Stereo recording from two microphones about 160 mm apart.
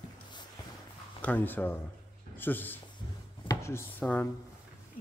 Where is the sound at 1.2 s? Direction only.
10° left (ahead or behind).